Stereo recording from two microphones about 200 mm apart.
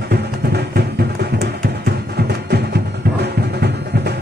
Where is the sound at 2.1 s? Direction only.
55° right (ahead or behind).